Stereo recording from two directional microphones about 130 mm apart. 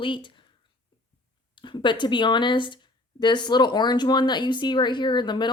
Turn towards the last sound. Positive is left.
turn(degrees=35)  # may be behind; listen again after turning